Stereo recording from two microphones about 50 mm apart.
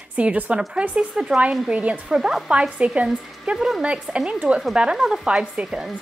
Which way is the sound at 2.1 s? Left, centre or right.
Centre.